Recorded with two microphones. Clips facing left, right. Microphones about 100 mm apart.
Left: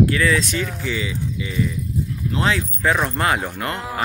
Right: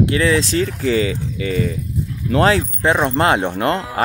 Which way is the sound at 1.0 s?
65° right (ahead or behind).